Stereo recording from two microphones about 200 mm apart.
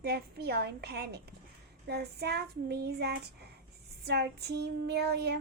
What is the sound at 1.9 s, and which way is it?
Child singing, 55° right (ahead or behind).